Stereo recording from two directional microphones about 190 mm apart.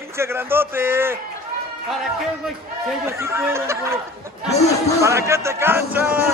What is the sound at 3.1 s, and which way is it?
Speech, 15° right (ahead or behind).